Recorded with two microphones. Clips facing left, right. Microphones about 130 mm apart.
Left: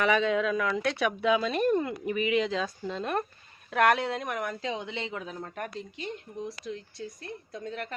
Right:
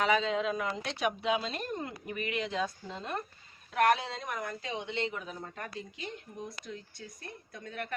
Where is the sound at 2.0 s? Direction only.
90° left.